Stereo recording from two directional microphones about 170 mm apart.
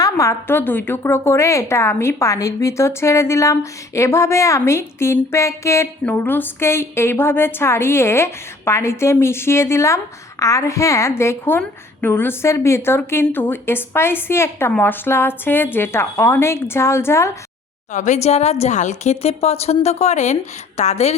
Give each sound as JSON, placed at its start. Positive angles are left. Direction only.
{"t": 0.0, "sound": "a woman's voice", "side_deg": 20}
{"t": 17.9, "sound": "a woman's voice", "side_deg": 45}